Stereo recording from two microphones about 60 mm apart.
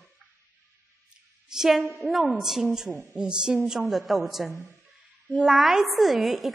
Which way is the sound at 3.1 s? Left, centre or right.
Centre.